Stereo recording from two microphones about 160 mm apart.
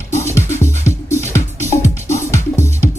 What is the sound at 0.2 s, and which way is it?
Music, 15° left (ahead or behind).